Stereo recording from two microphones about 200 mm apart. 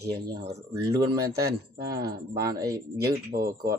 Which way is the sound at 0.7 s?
15° right (ahead or behind).